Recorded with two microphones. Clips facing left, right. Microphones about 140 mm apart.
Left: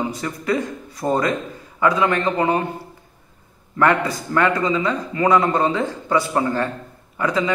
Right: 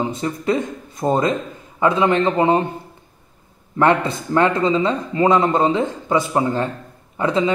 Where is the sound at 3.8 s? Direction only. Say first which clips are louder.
Right 2 dB; 25° right (ahead or behind).